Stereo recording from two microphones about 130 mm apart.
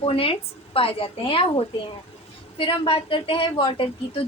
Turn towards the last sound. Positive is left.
turn(degrees=40)  # may be behind; listen again after turning